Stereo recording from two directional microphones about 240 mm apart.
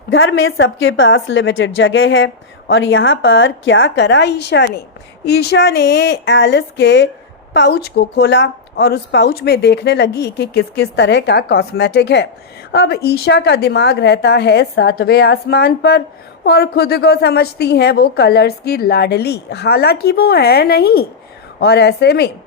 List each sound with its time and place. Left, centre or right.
0.1 s a woman's voice: left